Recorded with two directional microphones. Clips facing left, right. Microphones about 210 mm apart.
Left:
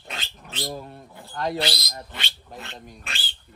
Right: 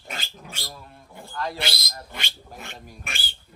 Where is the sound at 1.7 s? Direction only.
Centre (ahead or behind).